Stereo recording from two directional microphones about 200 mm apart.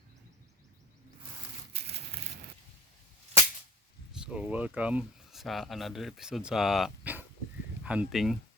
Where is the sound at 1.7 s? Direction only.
30° right (ahead or behind).